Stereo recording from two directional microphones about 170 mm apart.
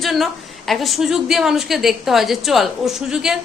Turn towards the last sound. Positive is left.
turn(degrees=-5)  # may be behind; listen again after turning